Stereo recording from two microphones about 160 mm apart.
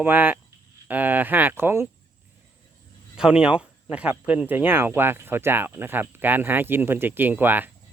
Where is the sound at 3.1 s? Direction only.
5° right (ahead or behind).